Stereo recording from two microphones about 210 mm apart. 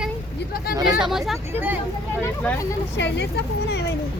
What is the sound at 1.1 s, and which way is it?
Speech, centre (ahead or behind).